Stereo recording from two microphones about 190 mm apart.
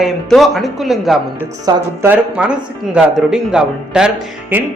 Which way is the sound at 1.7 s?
10° right (ahead or behind).